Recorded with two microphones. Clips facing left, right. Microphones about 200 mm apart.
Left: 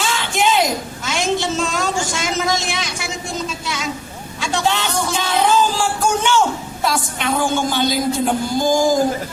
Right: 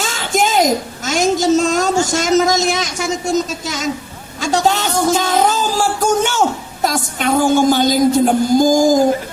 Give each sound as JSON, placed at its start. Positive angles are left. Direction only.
{"t": 0.0, "sound": "a sound", "side_deg": -40}
{"t": 4.4, "sound": "music", "side_deg": -40}
{"t": 6.8, "sound": "a woman's voice", "side_deg": -45}